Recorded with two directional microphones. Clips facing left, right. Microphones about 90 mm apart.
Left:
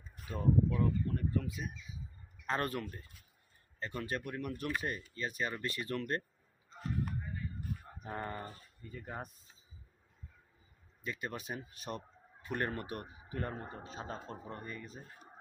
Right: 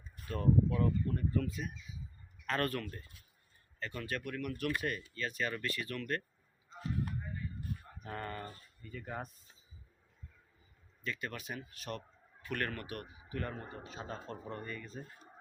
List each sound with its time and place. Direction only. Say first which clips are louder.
0.3 s speech: right 1 dB; 15° left (ahead or behind)
0.8 s speech: even; 5° left (ahead or behind); by 6.2 s 30° left (ahead or behind)
8.0 s speech: left 1 dB; 20° left (ahead or behind)
11.0 s speech: even; 20° left (ahead or behind)
14.0 s speech: right 1 dB; 15° left (ahead or behind)